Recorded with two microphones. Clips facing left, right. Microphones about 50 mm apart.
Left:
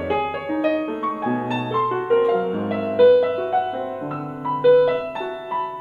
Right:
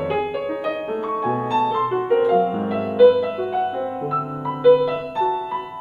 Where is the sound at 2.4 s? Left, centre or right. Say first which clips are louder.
Right 2 dB; centre.